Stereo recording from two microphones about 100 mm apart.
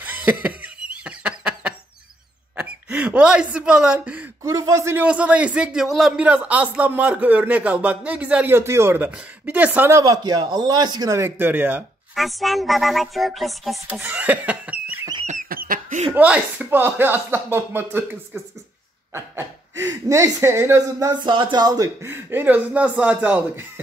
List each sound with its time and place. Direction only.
0.0 s cough: 15° right (ahead or behind)
2.5 s a sound: 10° right (ahead or behind)
4.4 s speech: 30° right (ahead or behind)
5.0 s speech: 15° right (ahead or behind)
6.2 s speech: 15° right (ahead or behind)
8.5 s speech: 25° right (ahead or behind)
10.0 s a man's voice: 45° right (ahead or behind)
11.2 s speech: 20° right (ahead or behind)
12.2 s speech: centre (ahead or behind)
13.8 s speech: 15° right (ahead or behind)
16.2 s speech: 15° right (ahead or behind)
19.1 s speech: 30° right (ahead or behind)
21.1 s a man's voice: 50° right (ahead or behind)
22.1 s speech: 20° right (ahead or behind)